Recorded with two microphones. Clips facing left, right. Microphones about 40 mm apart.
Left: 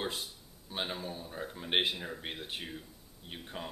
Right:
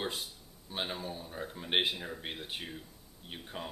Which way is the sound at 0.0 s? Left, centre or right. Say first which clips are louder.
Even; centre.